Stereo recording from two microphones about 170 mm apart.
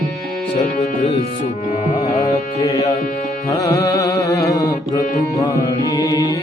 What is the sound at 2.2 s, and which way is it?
Music, 20° left (ahead or behind).